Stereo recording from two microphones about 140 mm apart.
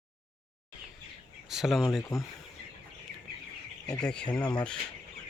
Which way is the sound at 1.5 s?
5° right (ahead or behind).